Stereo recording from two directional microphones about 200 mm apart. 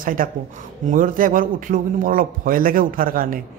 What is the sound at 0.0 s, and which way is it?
Speech, 45° right (ahead or behind).